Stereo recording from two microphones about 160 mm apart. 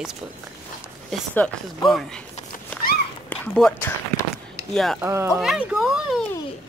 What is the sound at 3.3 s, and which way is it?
Speech, 5° left (ahead or behind).